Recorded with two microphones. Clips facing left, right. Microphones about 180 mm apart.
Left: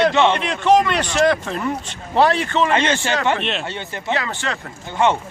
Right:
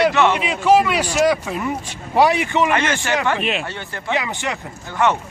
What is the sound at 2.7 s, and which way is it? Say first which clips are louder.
Speech: left 1 dB; 25° left (ahead or behind).